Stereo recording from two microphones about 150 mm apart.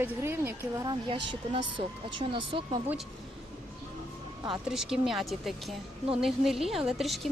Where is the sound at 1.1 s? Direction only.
35° right (ahead or behind).